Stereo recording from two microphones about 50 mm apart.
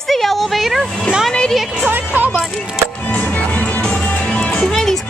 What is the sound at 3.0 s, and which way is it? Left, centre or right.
Music, left.